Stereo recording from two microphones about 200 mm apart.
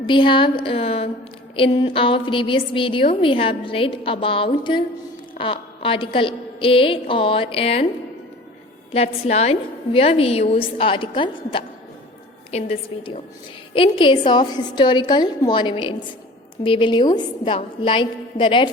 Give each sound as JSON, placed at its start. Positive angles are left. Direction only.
{"t": 0.0, "sound": "a woman's voice", "side_deg": 25}
{"t": 8.9, "sound": "a woman's voice", "side_deg": 30}